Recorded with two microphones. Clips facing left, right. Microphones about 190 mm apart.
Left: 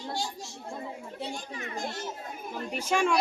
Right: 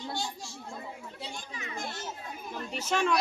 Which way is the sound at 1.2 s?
50° left (ahead or behind).